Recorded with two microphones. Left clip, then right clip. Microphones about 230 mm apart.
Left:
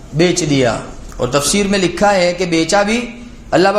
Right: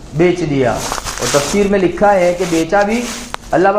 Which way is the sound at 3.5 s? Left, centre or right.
Left.